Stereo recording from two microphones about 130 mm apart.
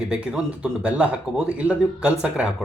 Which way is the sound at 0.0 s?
10° right (ahead or behind).